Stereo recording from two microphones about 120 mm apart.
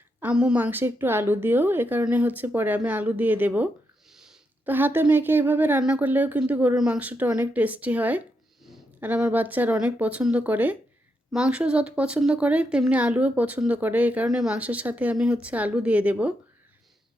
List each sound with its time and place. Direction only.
0.2 s a woman's voice: 10° right (ahead or behind)
4.1 s a sound: 5° right (ahead or behind)
4.6 s a woman's voice: 15° right (ahead or behind)